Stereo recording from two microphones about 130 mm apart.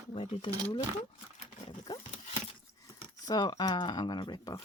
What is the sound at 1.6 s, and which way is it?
Speech, 40° left (ahead or behind).